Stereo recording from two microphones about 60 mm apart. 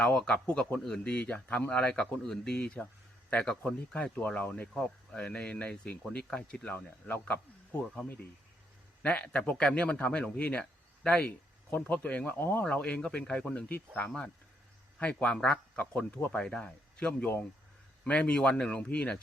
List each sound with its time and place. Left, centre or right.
0.0 s speech: centre
4.4 s speech: left
4.8 s speech: centre
9.0 s speech: centre
12.6 s speech: left